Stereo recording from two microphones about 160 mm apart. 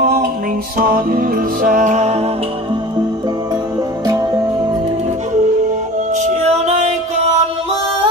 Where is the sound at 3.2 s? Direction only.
25° right (ahead or behind).